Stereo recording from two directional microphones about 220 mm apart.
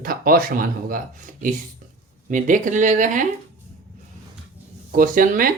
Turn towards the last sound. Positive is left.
turn(degrees=-40)  # may be behind; listen again after turning